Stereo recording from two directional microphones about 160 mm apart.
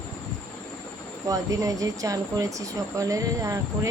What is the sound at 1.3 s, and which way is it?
Speech, 20° right (ahead or behind).